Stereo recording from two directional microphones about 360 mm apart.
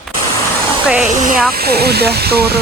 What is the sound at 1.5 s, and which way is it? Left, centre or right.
Speech, right.